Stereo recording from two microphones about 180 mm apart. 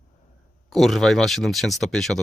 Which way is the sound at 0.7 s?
Centre (ahead or behind).